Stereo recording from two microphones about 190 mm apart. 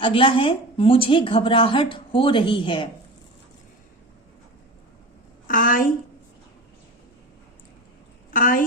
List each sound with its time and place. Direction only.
0.0 s a woman's voice: 25° left (ahead or behind)
5.5 s a sound: 45° left (ahead or behind)
8.3 s a woman's voice: 45° left (ahead or behind)